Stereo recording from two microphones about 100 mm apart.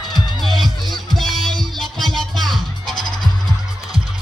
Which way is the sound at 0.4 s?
Centre (ahead or behind).